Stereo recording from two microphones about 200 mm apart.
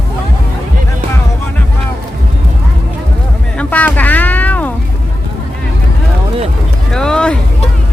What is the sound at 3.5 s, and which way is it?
Music, 10° left (ahead or behind).